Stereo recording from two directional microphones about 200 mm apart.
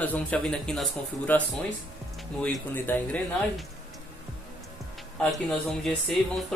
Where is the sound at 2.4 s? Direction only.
10° left (ahead or behind).